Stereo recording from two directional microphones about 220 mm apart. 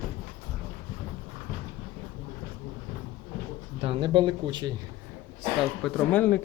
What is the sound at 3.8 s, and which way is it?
Speech, 25° right (ahead or behind).